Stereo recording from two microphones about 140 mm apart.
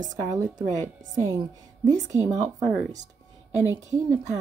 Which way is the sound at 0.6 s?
25° right (ahead or behind).